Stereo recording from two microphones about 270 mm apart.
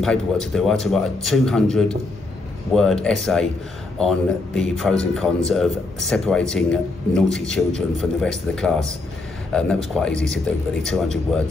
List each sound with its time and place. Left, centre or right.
0.0 s speech: centre